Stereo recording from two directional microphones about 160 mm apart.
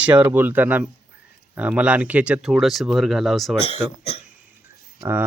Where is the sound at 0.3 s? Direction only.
10° right (ahead or behind).